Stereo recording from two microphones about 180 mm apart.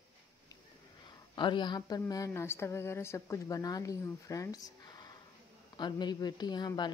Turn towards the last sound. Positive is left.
turn(degrees=25)  # may be behind; listen again after turning